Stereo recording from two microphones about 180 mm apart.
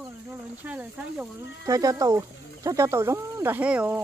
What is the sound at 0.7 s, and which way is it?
Speech, 5° right (ahead or behind).